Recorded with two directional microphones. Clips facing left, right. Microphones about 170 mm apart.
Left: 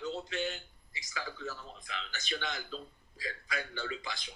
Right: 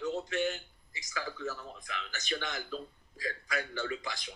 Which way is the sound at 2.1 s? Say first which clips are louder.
Right 1 dB; 45° right (ahead or behind).